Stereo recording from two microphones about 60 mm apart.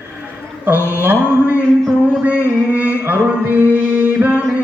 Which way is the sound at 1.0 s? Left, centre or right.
Right.